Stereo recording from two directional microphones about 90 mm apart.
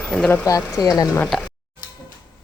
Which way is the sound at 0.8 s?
45° left (ahead or behind).